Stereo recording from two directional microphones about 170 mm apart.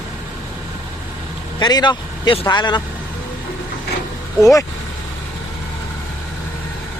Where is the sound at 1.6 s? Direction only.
25° left (ahead or behind).